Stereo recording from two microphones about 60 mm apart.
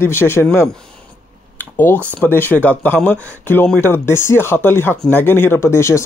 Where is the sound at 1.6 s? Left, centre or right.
Left.